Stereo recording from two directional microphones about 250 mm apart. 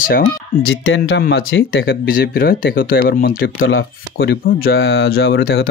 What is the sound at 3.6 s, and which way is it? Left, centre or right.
Speech, left.